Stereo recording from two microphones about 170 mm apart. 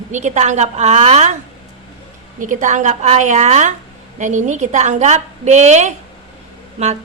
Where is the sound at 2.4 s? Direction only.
50° right (ahead or behind).